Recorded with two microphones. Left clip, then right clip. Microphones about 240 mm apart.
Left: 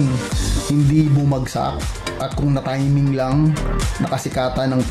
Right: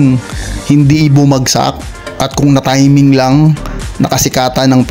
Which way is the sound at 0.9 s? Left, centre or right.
Right.